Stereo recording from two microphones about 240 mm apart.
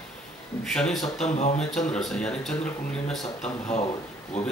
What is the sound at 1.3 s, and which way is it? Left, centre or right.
Speech, left.